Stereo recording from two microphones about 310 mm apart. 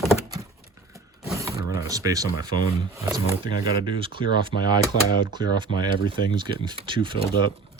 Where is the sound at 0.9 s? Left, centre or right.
Centre.